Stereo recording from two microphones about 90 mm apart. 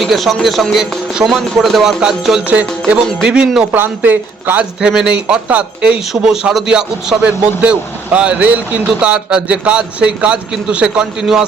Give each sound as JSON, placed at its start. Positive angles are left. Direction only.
{"t": 0.0, "sound": "a man's voice", "side_deg": 0}
{"t": 3.7, "sound": "speech", "side_deg": -20}
{"t": 4.8, "sound": "speech", "side_deg": -10}